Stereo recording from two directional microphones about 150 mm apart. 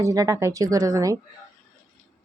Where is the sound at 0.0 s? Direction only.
20° right (ahead or behind).